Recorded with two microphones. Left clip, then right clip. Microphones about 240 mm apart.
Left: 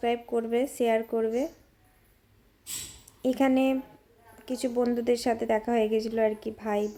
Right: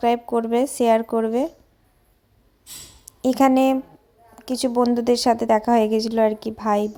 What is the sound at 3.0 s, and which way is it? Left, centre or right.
A woman's voice, right.